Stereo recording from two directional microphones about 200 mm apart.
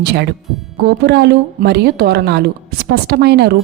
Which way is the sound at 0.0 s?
55° right (ahead or behind).